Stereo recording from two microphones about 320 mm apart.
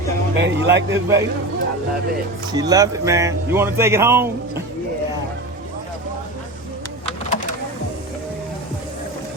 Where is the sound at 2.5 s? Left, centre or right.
Centre.